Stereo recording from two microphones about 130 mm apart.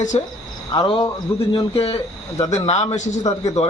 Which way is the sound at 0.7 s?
40° left (ahead or behind).